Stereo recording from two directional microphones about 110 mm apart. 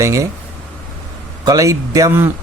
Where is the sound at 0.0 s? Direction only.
30° right (ahead or behind).